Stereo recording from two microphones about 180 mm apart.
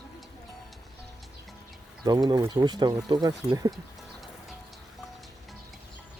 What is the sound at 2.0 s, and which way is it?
Speech, 20° right (ahead or behind).